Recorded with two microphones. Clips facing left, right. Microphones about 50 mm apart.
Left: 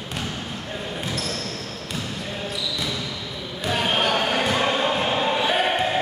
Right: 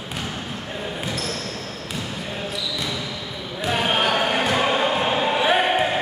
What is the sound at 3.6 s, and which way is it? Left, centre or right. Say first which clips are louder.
Basketball bounce: right 1 dB; centre.